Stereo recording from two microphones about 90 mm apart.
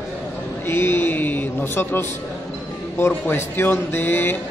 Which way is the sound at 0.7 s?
25° left (ahead or behind).